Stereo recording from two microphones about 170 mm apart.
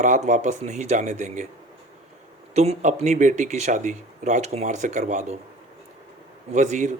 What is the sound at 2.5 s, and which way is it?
Speech, 40° right (ahead or behind).